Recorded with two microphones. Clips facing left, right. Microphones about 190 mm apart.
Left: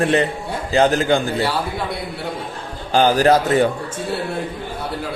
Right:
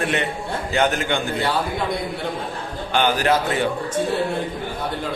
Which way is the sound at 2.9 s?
35° left (ahead or behind).